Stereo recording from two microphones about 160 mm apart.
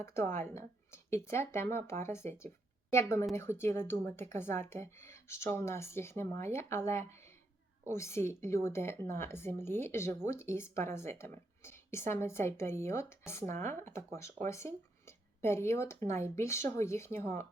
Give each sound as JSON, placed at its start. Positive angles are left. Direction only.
{"t": 0.0, "sound": "speech", "side_deg": 15}